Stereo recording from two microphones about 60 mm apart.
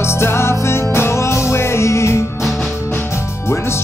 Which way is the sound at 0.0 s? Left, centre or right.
Left.